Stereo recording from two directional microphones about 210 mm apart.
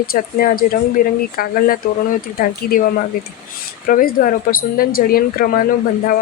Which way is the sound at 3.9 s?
40° left (ahead or behind).